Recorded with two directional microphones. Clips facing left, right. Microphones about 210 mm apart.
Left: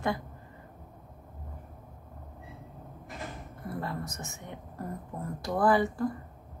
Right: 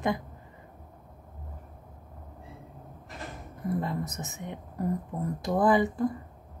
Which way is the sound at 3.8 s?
20° right (ahead or behind).